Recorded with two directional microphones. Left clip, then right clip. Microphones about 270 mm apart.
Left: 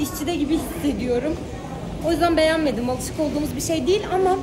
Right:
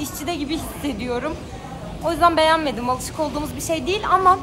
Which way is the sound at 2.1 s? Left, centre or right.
Centre.